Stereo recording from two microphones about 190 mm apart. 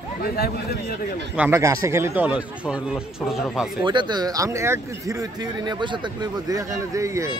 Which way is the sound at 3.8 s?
25° right (ahead or behind).